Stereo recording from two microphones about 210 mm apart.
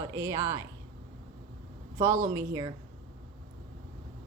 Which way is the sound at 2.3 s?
20° right (ahead or behind).